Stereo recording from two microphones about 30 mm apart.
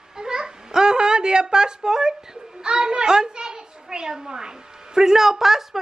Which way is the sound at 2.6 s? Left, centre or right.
Right.